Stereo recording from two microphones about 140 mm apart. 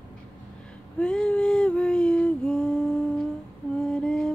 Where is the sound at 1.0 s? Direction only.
5° left (ahead or behind).